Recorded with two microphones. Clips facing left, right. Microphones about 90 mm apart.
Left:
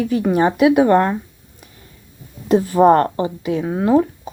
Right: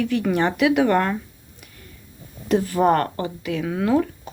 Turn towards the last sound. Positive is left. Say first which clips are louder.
# left 5 dB
turn(degrees=25)  # may be behind; listen again after turning